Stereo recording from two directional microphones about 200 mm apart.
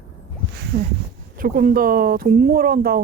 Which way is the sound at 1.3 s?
45° right (ahead or behind).